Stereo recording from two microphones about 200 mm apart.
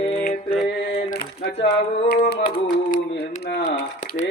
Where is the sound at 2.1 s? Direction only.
45° left (ahead or behind).